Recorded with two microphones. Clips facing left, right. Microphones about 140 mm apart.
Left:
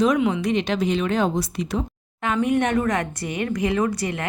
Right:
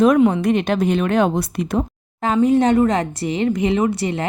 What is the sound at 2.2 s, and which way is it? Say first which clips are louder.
Speech: right 6 dB; 35° right (ahead or behind).